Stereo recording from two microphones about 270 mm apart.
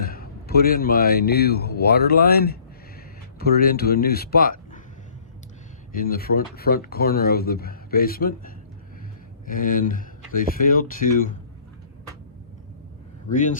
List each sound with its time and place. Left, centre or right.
0.0 s a man's voice: left
5.9 s speech: left
13.3 s speech: left